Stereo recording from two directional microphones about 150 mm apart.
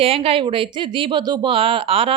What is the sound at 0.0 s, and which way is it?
A woman's voice, 40° right (ahead or behind).